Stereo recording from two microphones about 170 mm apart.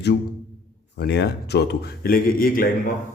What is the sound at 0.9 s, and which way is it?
A man's voice, 85° left.